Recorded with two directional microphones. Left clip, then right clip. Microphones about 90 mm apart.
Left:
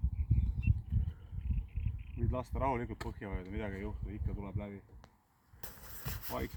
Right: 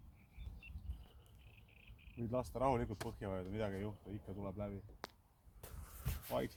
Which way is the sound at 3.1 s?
20° right (ahead or behind).